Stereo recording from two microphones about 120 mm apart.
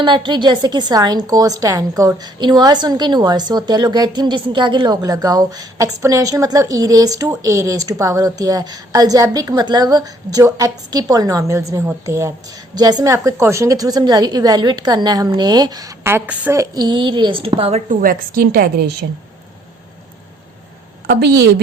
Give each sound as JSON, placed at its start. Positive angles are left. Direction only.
{"t": 0.0, "sound": "a woman's voice", "side_deg": -40}
{"t": 5.0, "sound": "a woman's voice", "side_deg": -30}
{"t": 13.1, "sound": "a woman's voice", "side_deg": -20}
{"t": 16.0, "sound": "a woman's voice", "side_deg": -15}
{"t": 16.6, "sound": "a woman's voice", "side_deg": -35}